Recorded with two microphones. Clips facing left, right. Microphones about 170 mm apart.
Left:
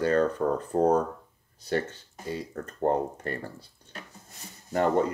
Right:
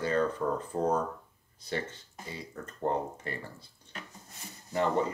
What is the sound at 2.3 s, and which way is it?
Speech, 45° left (ahead or behind).